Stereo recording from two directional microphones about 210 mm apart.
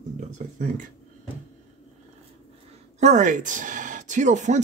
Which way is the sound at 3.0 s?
35° right (ahead or behind).